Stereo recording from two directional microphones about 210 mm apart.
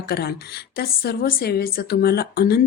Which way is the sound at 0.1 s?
45° left (ahead or behind).